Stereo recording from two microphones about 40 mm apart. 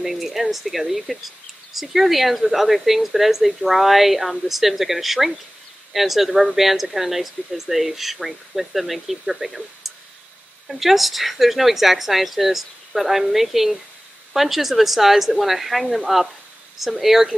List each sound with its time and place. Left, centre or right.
0.0 s speech: centre